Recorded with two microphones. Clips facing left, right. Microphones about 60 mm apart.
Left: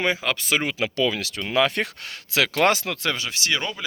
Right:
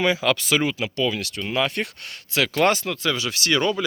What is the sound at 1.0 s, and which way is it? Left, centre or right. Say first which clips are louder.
Speech: even; left.